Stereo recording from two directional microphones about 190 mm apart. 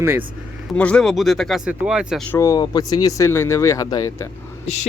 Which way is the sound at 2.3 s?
15° left (ahead or behind).